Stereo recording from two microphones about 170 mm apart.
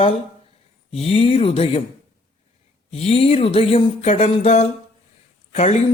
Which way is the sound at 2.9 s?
35° left (ahead or behind).